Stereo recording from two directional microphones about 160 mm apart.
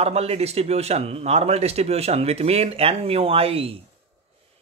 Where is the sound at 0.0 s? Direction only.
40° right (ahead or behind).